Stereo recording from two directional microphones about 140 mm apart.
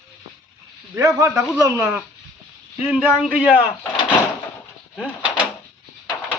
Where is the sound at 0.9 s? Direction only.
20° right (ahead or behind).